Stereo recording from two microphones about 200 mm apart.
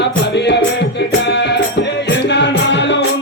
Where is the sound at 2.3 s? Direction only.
60° left (ahead or behind).